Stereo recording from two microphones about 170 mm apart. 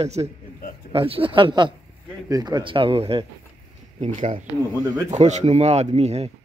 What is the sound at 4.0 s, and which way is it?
A man's voice, 45° right (ahead or behind).